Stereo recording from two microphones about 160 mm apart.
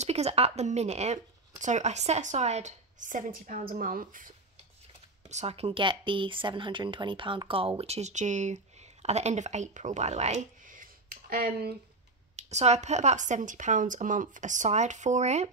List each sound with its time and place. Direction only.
0.0 s speech: 40° right (ahead or behind); by 4.3 s 60° right (ahead or behind)
5.3 s speech: 45° right (ahead or behind); by 11.7 s 60° right (ahead or behind)
12.4 s speech: 45° right (ahead or behind)